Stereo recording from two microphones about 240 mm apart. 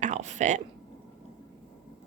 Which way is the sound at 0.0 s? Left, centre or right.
Right.